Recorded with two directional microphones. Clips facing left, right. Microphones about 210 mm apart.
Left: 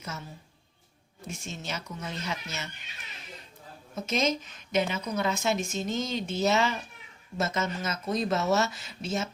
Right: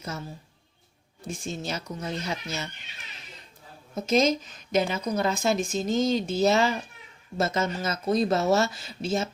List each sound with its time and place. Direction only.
1.3 s speech: 35° right (ahead or behind)
3.9 s speech: 35° right (ahead or behind)